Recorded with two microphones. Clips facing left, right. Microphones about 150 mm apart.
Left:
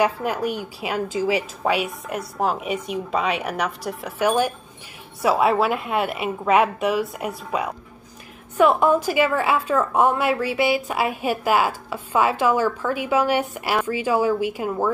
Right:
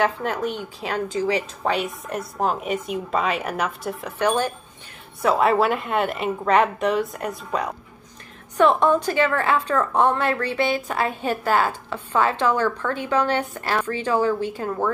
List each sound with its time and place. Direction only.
0.0 s a woman's voice: 10° left (ahead or behind)